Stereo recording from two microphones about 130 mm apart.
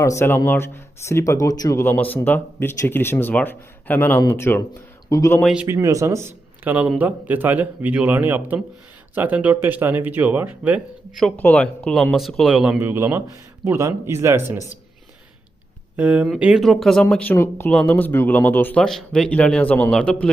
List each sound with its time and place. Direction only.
0.0 s speech: 20° left (ahead or behind)
5.6 s speech: 20° right (ahead or behind)
11.3 s speech: 10° left (ahead or behind)
12.8 s speech: 15° right (ahead or behind)
16.0 s speech: 10° right (ahead or behind); by 18.8 s 15° left (ahead or behind)
18.8 s speech: 5° left (ahead or behind)